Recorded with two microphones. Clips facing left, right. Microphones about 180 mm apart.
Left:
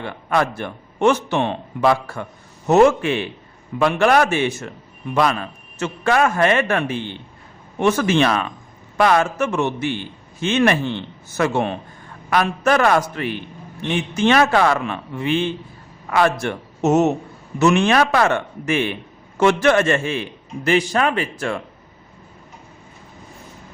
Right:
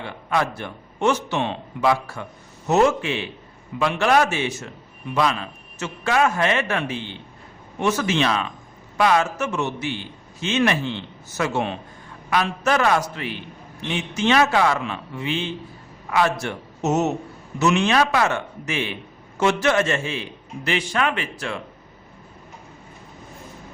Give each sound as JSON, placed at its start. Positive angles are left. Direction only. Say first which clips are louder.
{"t": 0.3, "sound": "a man's voice", "louder": "left 3 dB", "side_deg": 55}
{"t": 20.7, "sound": "speech", "louder": "left 5 dB", "side_deg": 40}